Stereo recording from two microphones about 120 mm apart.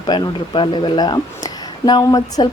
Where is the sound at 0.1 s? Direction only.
40° left (ahead or behind).